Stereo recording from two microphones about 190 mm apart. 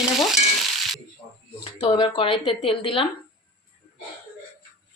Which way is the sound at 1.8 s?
25° left (ahead or behind).